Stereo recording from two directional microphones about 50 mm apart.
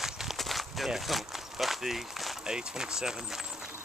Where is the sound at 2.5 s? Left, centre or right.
Centre.